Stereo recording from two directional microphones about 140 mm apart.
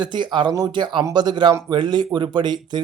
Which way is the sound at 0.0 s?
30° right (ahead or behind).